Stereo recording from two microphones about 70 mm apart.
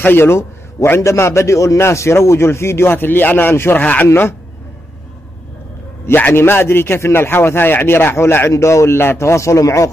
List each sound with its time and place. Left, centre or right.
0.0 s a man's voice: left
3.8 s speech: centre
4.1 s a man's voice: left
6.0 s a man's voice: left